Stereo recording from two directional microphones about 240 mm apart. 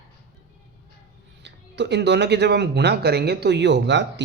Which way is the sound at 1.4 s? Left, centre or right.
Right.